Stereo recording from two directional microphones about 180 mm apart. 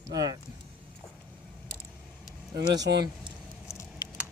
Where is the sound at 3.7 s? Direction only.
15° left (ahead or behind).